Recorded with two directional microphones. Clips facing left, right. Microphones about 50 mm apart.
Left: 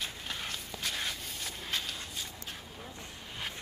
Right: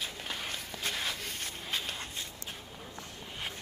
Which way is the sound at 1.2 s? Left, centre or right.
Right.